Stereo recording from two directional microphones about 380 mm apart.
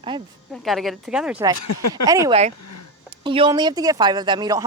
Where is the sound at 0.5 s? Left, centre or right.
Centre.